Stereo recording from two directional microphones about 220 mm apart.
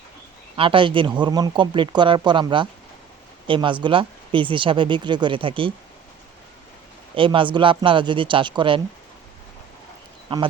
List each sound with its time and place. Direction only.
0.5 s speech: 25° right (ahead or behind)
7.2 s speech: 20° right (ahead or behind)
10.3 s speech: 25° right (ahead or behind)